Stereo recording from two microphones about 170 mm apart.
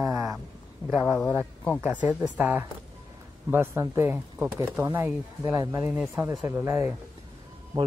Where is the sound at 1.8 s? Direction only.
10° right (ahead or behind).